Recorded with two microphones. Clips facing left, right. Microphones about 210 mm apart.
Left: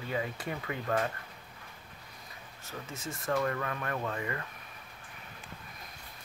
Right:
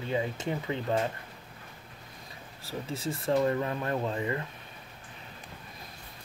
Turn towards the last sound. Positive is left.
turn(degrees=-25)  # may be behind; listen again after turning